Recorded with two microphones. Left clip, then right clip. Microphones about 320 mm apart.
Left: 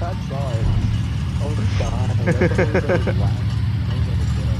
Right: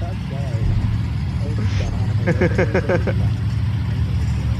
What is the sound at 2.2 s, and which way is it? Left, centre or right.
Speech, centre.